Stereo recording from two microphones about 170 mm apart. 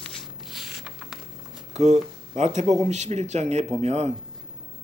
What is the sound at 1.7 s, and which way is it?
Speech, 45° right (ahead or behind).